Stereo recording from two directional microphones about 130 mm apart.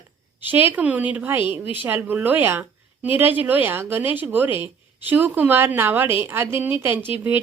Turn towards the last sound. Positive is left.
turn(degrees=-15)  # may be behind; listen again after turning